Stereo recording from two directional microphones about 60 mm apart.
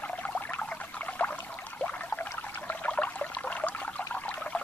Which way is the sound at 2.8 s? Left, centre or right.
Left.